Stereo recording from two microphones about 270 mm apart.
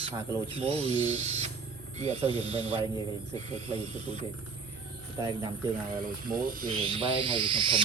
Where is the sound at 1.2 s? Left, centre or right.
Right.